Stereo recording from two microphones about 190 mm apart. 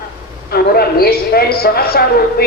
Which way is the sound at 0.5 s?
55° left (ahead or behind).